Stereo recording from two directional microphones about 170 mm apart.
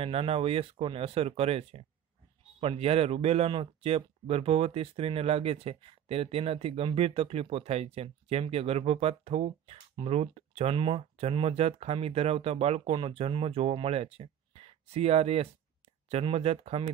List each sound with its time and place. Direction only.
0.0 s speech: 35° right (ahead or behind)